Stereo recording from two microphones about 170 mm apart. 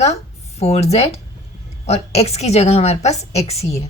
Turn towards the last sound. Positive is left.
turn(degrees=40)  # may be behind; listen again after turning